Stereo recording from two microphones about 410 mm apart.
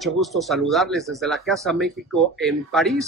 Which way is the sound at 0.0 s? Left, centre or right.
Centre.